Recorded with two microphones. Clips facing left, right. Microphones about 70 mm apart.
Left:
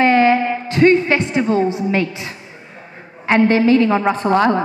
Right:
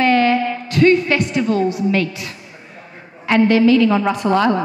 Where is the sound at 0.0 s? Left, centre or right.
Left.